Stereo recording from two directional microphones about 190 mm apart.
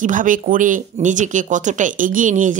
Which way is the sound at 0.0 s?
45° right (ahead or behind).